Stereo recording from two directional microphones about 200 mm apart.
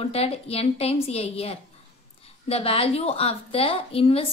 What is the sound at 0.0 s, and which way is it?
A woman's voice, 30° left (ahead or behind).